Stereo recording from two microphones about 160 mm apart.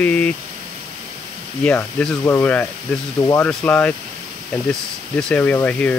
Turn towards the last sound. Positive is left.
turn(degrees=10)  # may be behind; listen again after turning